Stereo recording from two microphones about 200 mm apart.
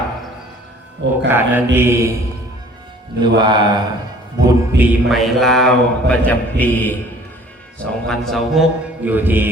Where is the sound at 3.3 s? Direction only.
20° right (ahead or behind).